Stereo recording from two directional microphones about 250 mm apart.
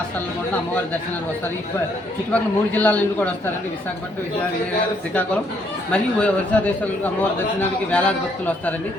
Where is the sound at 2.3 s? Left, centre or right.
Centre.